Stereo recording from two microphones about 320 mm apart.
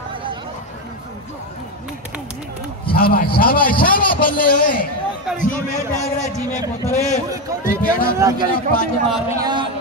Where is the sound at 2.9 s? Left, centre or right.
Left.